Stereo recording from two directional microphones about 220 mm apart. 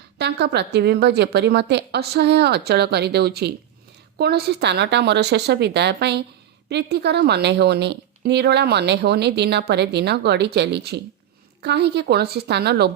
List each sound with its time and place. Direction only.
0.2 s a woman's voice: 50° right (ahead or behind)